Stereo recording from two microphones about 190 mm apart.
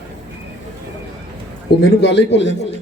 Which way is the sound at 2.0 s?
65° left (ahead or behind).